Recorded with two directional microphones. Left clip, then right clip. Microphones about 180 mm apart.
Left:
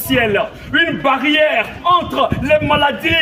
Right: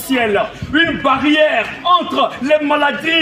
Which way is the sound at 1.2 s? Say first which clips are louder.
Right 1 dB; 35° left (ahead or behind).